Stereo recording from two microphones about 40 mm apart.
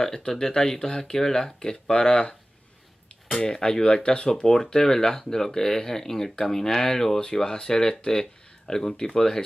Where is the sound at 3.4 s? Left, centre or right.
Centre.